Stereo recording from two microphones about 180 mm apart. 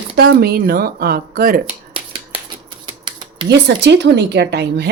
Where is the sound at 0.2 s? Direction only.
65° right (ahead or behind).